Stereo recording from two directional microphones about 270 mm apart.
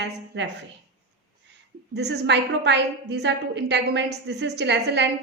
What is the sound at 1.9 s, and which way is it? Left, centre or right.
A woman's voice, right.